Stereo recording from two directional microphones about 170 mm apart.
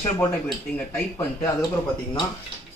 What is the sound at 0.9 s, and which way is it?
Speech, 15° left (ahead or behind).